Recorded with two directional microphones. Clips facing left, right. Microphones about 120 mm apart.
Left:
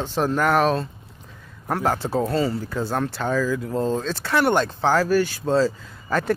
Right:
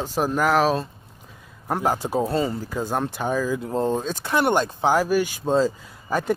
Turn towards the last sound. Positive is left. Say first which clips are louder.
# left 1 dB
turn(degrees=-15)  # may be behind; listen again after turning